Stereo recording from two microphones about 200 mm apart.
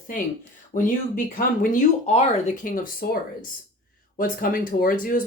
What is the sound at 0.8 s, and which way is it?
Speech, 40° left (ahead or behind).